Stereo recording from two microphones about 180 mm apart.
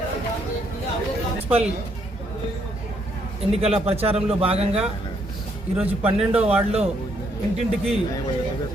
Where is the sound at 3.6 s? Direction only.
35° right (ahead or behind).